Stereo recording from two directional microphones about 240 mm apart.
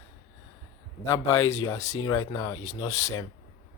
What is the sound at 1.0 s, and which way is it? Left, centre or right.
Speech, centre.